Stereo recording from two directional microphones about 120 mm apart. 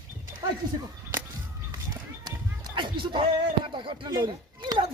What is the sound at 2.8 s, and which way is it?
Speech, 40° right (ahead or behind).